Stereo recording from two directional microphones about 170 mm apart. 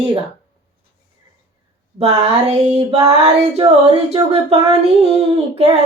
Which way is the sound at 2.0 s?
35° right (ahead or behind).